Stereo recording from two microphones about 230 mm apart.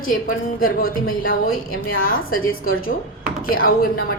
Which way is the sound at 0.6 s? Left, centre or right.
Left.